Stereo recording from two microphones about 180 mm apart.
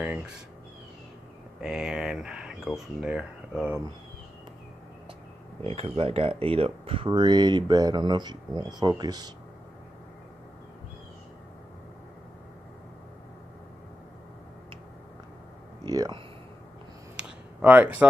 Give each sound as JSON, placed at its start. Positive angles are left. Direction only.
{"t": 1.6, "sound": "speech", "side_deg": -5}
{"t": 5.6, "sound": "speech", "side_deg": -30}
{"t": 15.8, "sound": "speech", "side_deg": -20}
{"t": 17.2, "sound": "a sound", "side_deg": -10}